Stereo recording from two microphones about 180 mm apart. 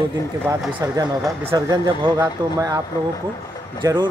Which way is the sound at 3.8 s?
25° right (ahead or behind).